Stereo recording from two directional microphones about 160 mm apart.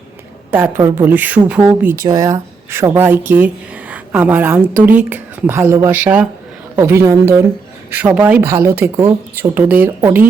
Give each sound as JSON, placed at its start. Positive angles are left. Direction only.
{"t": 0.8, "sound": "speech", "side_deg": -20}
{"t": 2.0, "sound": "speech", "side_deg": -20}
{"t": 8.4, "sound": "speech", "side_deg": -20}